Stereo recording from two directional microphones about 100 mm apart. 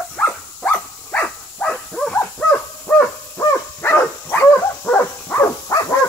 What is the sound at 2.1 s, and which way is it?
Owl, 15° left (ahead or behind).